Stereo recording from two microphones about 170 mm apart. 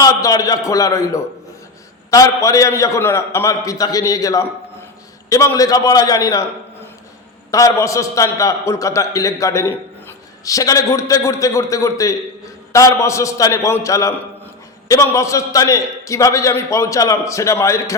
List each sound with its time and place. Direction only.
0.0 s a man's voice: 20° left (ahead or behind)
7.5 s a man's voice: 20° left (ahead or behind)